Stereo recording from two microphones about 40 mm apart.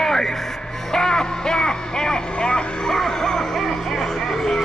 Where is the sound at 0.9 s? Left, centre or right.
Centre.